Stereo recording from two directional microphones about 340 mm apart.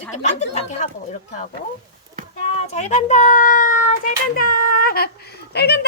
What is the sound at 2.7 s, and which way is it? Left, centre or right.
A child's voice, centre.